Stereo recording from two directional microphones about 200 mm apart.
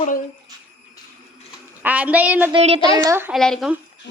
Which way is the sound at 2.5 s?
30° right (ahead or behind).